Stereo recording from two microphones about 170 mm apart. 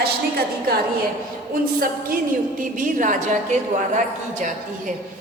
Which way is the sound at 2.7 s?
50° right (ahead or behind).